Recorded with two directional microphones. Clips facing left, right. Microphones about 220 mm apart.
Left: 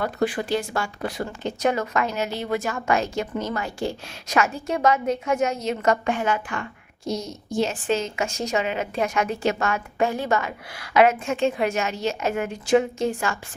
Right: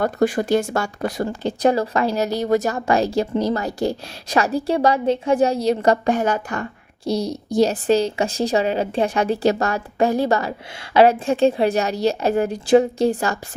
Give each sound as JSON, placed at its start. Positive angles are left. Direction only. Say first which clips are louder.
{"t": 0.0, "sound": "speech", "louder": "right 5 dB", "side_deg": -45}